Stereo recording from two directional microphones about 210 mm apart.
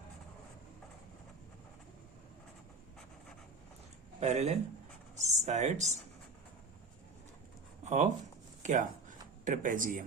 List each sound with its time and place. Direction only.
4.2 s speech: 30° right (ahead or behind)
7.9 s speech: 35° right (ahead or behind)
8.6 s a sound: 35° right (ahead or behind)
9.4 s speech: 40° right (ahead or behind)